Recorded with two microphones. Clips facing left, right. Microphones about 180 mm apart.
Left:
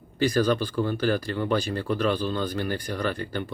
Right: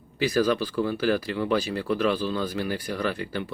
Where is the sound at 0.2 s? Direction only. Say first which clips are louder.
Even; 5° right (ahead or behind).